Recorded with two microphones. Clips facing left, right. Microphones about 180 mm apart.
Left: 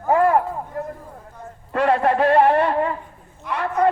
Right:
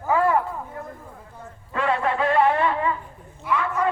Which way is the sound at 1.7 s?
40° left (ahead or behind).